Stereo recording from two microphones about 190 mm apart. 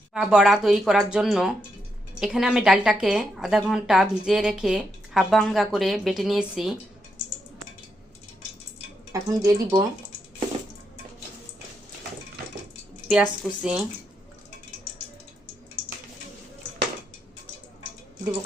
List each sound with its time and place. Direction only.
0.1 s a woman's voice: 5° right (ahead or behind)
9.1 s speech: 15° right (ahead or behind)
13.1 s a woman's voice: 5° right (ahead or behind)